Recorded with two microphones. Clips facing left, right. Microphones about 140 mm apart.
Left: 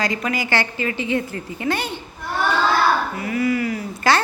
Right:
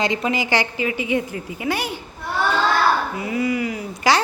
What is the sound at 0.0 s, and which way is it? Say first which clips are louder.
A woman's voice: right 2 dB; 25° right (ahead or behind).